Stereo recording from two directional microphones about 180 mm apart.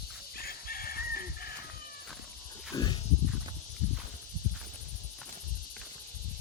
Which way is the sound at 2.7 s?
25° left (ahead or behind).